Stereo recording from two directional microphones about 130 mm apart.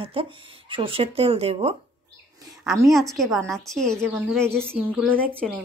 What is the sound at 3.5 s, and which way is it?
Speech, 5° left (ahead or behind).